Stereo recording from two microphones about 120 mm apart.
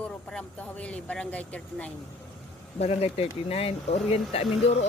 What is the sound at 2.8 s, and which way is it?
Speech, 60° left (ahead or behind).